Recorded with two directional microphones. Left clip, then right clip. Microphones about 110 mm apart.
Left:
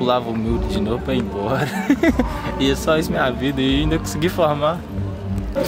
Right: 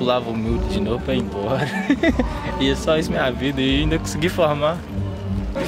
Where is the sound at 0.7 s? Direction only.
10° left (ahead or behind).